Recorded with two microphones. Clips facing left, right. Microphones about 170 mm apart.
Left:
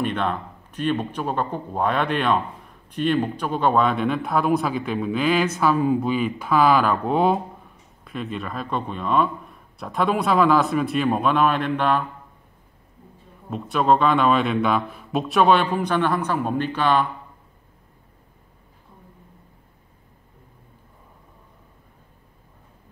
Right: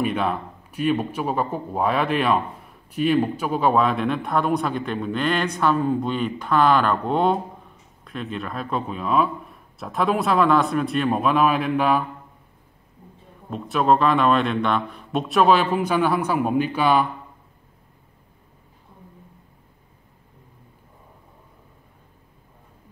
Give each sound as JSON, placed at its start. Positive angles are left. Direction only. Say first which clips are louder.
{"t": 0.0, "sound": "speech", "louder": "right 1 dB", "side_deg": -5}
{"t": 13.5, "sound": "speech", "louder": "even", "side_deg": 0}